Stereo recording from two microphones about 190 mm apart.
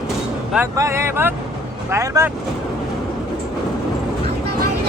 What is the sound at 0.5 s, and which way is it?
Speech, 15° right (ahead or behind).